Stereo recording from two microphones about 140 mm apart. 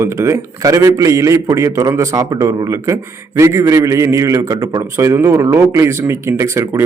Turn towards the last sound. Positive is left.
turn(degrees=-20)  # may be behind; listen again after turning